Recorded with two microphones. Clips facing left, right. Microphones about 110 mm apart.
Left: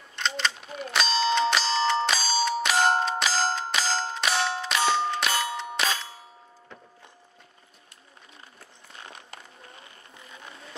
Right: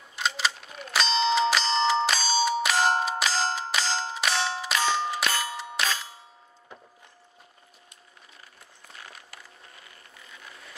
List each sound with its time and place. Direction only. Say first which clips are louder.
0.1 s bell: even; 5° right (ahead or behind)
5.4 s ding: left 2 dB; 5° right (ahead or behind)
9.0 s vehicle: left 5 dB; 25° left (ahead or behind)